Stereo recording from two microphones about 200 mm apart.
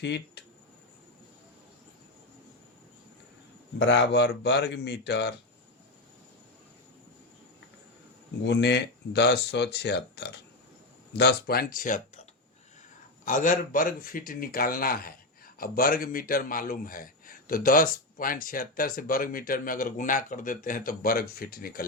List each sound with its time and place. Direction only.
0.0 s speech: 60° left (ahead or behind)
3.8 s speech: 60° left (ahead or behind)
8.4 s a man's voice: 60° left (ahead or behind); by 12.2 s 40° left (ahead or behind)
13.2 s a man's voice: 40° left (ahead or behind)